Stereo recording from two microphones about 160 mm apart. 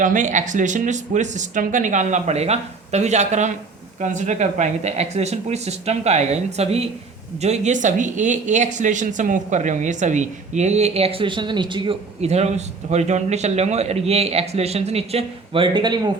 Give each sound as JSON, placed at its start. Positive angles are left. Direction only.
{"t": 0.0, "sound": "speech", "side_deg": -50}